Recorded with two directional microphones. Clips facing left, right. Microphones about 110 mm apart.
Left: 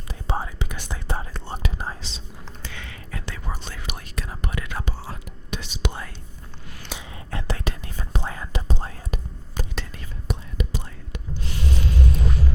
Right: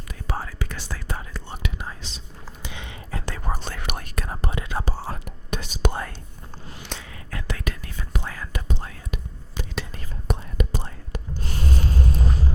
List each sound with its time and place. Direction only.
0.1 s whispering: 25° left (ahead or behind)
2.6 s a sound: 20° right (ahead or behind)
3.1 s whispering: 40° right (ahead or behind)
4.4 s whispering: 30° right (ahead or behind); by 6.1 s 50° right (ahead or behind)
7.0 s whispering: 25° left (ahead or behind)
9.9 s whispering: 45° right (ahead or behind)
10.8 s a sound: 40° right (ahead or behind)